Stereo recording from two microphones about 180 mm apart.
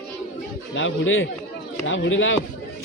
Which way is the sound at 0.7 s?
90° left.